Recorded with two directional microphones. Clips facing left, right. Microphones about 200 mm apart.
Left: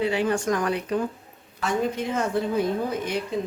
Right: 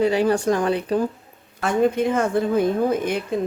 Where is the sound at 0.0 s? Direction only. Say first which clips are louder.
Right 5 dB; 40° right (ahead or behind).